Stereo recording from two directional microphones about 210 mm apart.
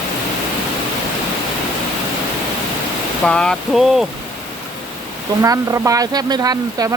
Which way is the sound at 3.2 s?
5° left (ahead or behind).